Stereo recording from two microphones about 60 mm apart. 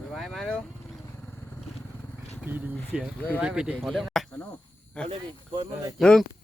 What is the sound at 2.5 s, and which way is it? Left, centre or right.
Speech, right.